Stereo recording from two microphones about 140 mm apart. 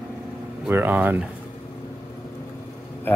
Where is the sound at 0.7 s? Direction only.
15° right (ahead or behind).